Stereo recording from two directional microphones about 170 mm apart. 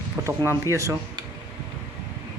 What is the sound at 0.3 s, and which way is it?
Speech, 15° right (ahead or behind).